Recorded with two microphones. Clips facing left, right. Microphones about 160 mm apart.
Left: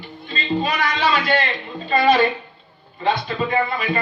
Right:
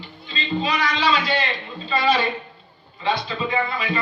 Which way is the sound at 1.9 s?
50° left (ahead or behind).